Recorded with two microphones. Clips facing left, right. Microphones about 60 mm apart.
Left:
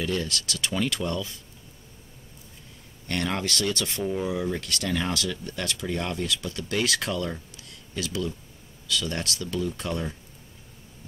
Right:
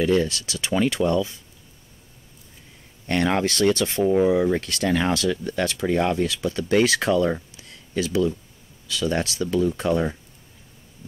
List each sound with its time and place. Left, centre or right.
0.0 s speech: right
3.1 s speech: right